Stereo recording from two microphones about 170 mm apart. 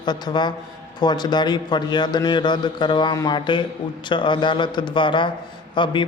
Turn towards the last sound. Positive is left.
turn(degrees=30)  # may be behind; listen again after turning